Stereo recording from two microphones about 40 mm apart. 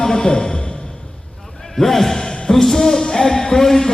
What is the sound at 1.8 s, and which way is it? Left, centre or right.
A man's voice, centre.